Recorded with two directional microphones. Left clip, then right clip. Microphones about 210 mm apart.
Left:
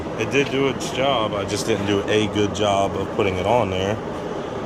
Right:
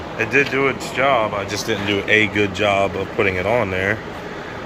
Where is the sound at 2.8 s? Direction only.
35° right (ahead or behind).